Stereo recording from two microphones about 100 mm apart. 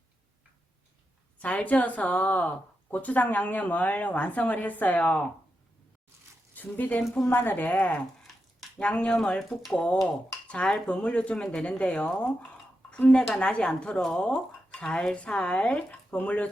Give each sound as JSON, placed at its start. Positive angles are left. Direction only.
{"t": 1.4, "sound": "speech", "side_deg": 15}
{"t": 6.5, "sound": "speech", "side_deg": 15}